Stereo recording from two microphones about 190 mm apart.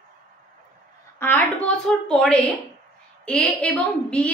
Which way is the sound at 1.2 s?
10° left (ahead or behind).